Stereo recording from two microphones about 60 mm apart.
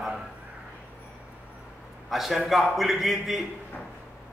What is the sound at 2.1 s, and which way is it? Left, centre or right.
A man's voice, centre.